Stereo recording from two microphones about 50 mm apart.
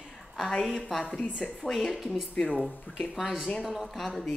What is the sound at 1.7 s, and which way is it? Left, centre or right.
Speech, centre.